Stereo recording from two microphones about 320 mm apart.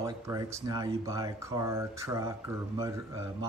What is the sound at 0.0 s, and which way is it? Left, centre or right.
Speech, centre.